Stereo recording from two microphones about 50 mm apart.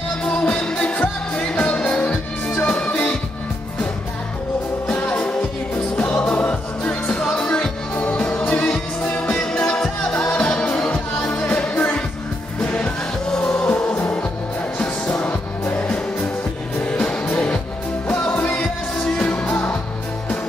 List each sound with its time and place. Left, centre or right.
0.2 s music: left
4.8 s music: left
9.0 s music: left
16.8 s music: left
19.4 s music: left